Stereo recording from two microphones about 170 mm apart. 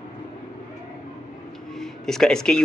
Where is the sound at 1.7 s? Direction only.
Centre (ahead or behind).